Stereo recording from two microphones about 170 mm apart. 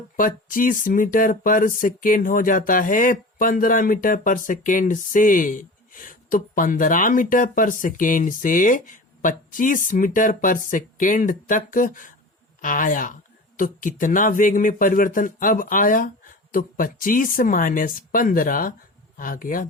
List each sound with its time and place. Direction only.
0.2 s speech: 55° left (ahead or behind)